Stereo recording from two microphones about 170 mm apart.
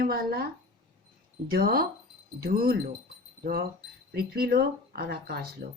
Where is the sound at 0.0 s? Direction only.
60° right (ahead or behind).